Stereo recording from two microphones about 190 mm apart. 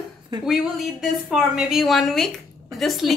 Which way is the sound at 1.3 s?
Centre (ahead or behind).